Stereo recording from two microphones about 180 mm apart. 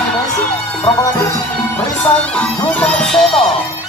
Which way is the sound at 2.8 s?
5° left (ahead or behind).